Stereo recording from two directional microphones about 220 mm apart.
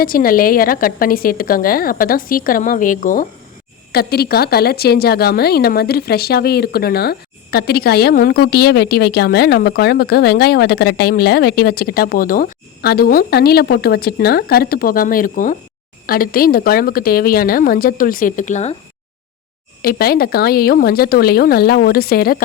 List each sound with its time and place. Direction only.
0.0 s a woman's voice: 40° left (ahead or behind)
19.8 s a woman's voice: 45° left (ahead or behind)